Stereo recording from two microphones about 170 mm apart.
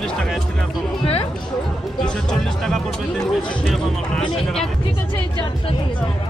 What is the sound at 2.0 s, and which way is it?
Speech, 5° left (ahead or behind).